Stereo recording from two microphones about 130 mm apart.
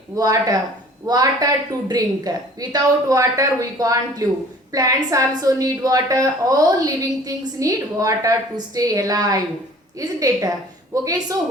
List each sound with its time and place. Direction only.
0.2 s a woman's voice: 30° right (ahead or behind)